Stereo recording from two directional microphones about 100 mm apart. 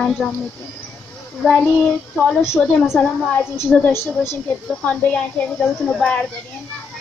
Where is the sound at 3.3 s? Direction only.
20° left (ahead or behind).